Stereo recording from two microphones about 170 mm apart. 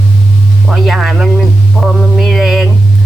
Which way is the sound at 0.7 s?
Centre (ahead or behind).